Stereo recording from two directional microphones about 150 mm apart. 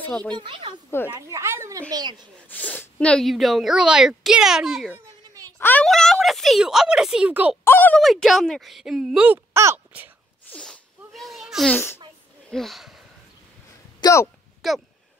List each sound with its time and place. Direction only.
0.0 s speech: 5° left (ahead or behind)
0.3 s speech: 35° right (ahead or behind)
1.0 s speech: 20° right (ahead or behind)
2.4 s speech: 10° left (ahead or behind)
5.6 s speech: 10° left (ahead or behind); by 7.5 s 10° right (ahead or behind)
7.6 s speech: 10° left (ahead or behind); by 10.1 s 15° right (ahead or behind)
10.4 s sneeze: 5° left (ahead or behind)
11.7 s a child's voice: 15° left (ahead or behind)
12.4 s speech: centre (ahead or behind)
14.0 s speech: 20° left (ahead or behind)
14.6 s speech: centre (ahead or behind)